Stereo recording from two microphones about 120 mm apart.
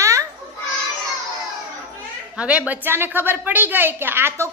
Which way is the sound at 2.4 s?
10° right (ahead or behind).